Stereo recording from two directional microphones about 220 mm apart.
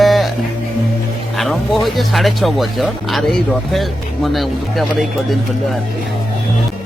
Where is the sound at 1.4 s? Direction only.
Centre (ahead or behind).